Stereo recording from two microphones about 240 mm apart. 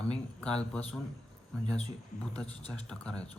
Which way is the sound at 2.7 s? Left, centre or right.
Centre.